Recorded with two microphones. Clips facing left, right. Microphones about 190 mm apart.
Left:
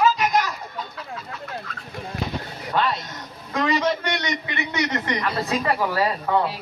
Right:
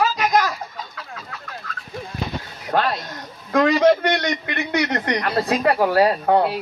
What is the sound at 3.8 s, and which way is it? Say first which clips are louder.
A man's voice: right 8 dB; 65° right (ahead or behind).